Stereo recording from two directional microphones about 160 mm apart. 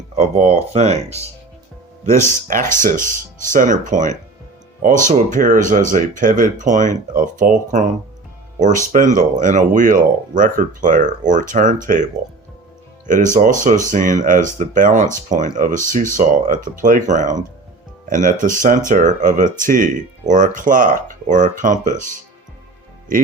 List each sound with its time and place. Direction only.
0.2 s speech: 45° right (ahead or behind)
2.0 s speech: 55° right (ahead or behind)
13.3 s speech: 50° right (ahead or behind)